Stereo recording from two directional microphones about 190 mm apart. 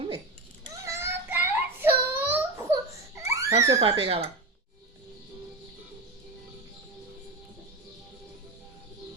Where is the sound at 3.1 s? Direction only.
15° right (ahead or behind).